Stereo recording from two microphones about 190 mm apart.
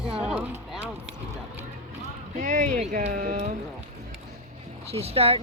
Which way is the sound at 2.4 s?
40° right (ahead or behind).